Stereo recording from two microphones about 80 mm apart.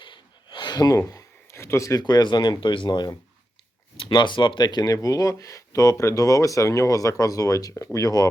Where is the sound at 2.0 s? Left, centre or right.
Left.